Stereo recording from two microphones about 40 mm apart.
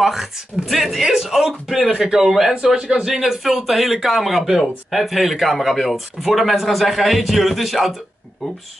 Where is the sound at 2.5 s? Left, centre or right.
Centre.